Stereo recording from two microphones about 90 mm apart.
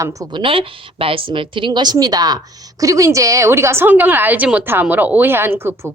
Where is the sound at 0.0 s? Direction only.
40° right (ahead or behind).